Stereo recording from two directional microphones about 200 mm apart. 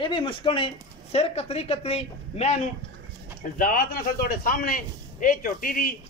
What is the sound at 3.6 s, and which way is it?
A man's voice, 45° left (ahead or behind).